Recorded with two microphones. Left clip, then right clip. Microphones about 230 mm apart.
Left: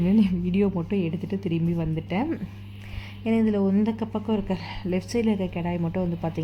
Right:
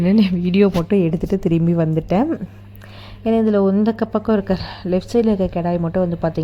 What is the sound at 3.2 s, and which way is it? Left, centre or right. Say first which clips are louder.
A woman's voice: right 8 dB; centre.